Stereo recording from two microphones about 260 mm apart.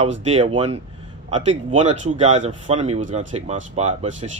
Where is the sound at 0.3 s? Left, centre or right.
Right.